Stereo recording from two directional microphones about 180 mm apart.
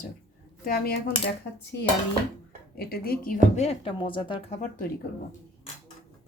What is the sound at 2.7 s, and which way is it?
A woman's voice, 60° left (ahead or behind).